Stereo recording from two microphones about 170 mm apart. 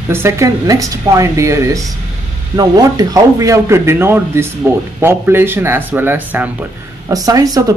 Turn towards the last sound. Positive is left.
turn(degrees=-20)  # may be behind; listen again after turning